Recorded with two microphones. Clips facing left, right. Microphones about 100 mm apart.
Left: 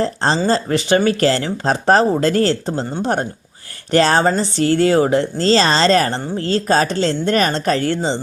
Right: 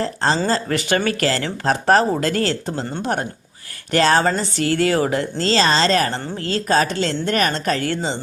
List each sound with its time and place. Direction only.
0.0 s speech: 30° left (ahead or behind)